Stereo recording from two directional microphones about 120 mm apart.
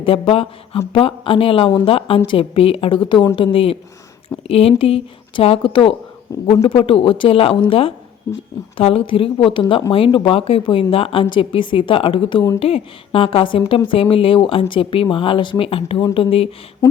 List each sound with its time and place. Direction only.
0.0 s a woman's voice: 50° left (ahead or behind)